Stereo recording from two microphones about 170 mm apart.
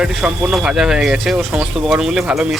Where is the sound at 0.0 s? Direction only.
5° right (ahead or behind).